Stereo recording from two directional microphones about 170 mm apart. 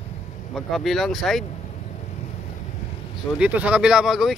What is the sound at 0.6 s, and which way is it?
Speech, centre (ahead or behind).